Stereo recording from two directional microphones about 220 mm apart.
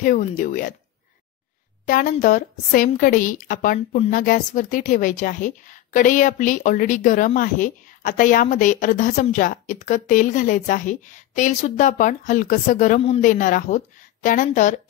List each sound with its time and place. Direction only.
0.0 s a woman's voice: 40° left (ahead or behind)
1.9 s a woman's voice: 40° left (ahead or behind)